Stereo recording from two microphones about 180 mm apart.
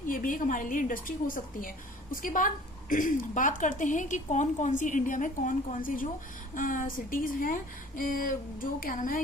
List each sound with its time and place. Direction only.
0.1 s a woman's voice: 50° left (ahead or behind)